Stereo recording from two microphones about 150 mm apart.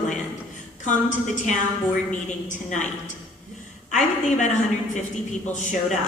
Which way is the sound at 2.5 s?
55° left (ahead or behind).